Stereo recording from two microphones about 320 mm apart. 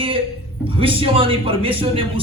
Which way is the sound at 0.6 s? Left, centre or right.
Centre.